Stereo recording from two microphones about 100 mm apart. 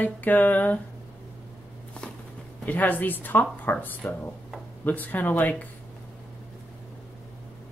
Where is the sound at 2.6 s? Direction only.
15° left (ahead or behind).